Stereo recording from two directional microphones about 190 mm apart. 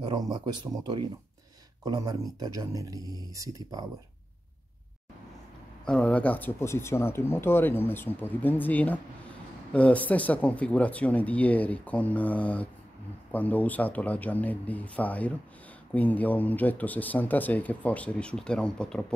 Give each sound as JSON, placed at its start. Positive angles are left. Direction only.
{"t": 0.1, "sound": "speech", "side_deg": -20}
{"t": 5.9, "sound": "speech", "side_deg": 5}